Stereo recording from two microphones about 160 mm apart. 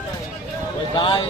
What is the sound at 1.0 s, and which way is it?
Speech, 30° left (ahead or behind).